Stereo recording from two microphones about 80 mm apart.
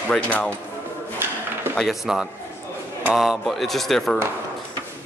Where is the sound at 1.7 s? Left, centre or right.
Centre.